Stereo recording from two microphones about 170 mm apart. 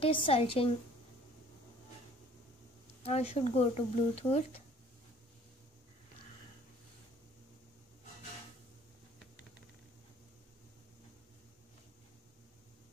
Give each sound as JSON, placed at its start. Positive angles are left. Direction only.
{"t": 0.0, "sound": "speech", "side_deg": 30}
{"t": 3.0, "sound": "speech", "side_deg": 35}